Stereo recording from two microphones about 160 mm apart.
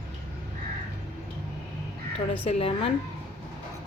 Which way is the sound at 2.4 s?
35° left (ahead or behind).